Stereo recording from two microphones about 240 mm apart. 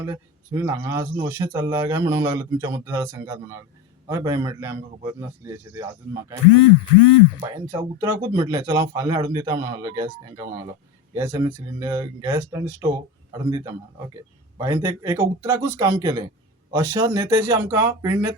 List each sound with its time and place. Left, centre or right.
0.0 s speech: centre
7.5 s speech: centre